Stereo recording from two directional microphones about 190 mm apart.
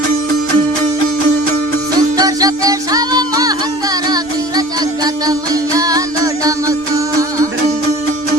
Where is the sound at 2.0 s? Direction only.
20° right (ahead or behind).